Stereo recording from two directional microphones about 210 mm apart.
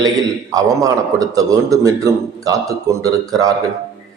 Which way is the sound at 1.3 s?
15° right (ahead or behind).